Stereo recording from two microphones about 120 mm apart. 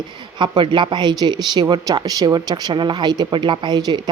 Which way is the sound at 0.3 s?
40° right (ahead or behind).